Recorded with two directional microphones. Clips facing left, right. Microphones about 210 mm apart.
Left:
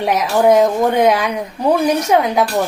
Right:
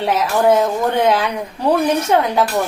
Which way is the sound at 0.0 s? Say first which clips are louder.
Left 2 dB; 15° left (ahead or behind).